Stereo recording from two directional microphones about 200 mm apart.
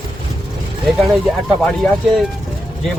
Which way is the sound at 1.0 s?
Centre (ahead or behind).